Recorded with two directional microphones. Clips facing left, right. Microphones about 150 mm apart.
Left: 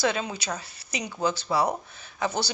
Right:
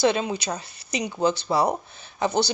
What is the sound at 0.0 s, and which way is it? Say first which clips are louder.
A woman's voice: right 5 dB; 20° right (ahead or behind).